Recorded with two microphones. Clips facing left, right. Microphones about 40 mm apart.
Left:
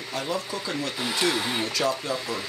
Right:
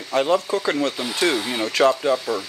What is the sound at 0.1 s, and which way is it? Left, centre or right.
Speech, right.